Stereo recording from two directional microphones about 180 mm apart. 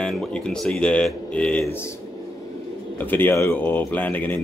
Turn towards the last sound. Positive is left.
turn(degrees=10)  # may be behind; listen again after turning